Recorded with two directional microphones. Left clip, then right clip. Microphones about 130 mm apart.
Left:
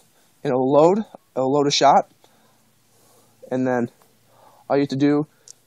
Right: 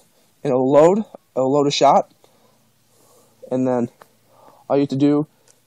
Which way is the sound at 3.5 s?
Centre (ahead or behind).